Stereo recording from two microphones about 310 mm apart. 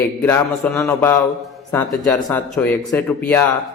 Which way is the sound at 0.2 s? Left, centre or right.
Centre.